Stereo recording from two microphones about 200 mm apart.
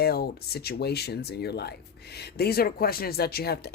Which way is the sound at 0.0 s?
50° left (ahead or behind).